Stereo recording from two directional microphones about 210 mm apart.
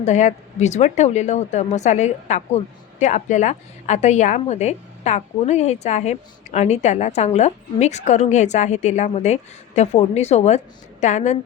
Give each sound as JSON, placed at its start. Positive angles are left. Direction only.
{"t": 0.0, "sound": "a woman's voice", "side_deg": 35}